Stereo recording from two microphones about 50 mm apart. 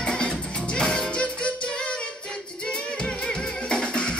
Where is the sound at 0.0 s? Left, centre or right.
Centre.